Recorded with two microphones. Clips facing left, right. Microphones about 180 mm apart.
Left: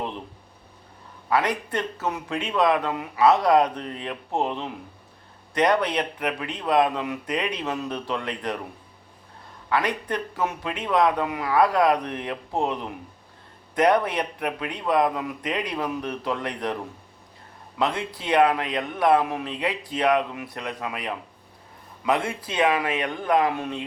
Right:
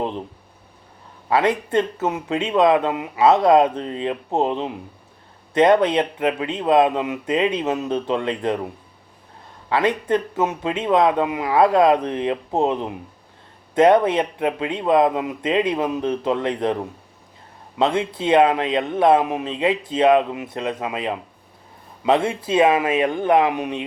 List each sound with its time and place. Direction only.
1.3 s a man's voice: 25° right (ahead or behind)
9.6 s a man's voice: 25° right (ahead or behind)
17.7 s a man's voice: 25° right (ahead or behind)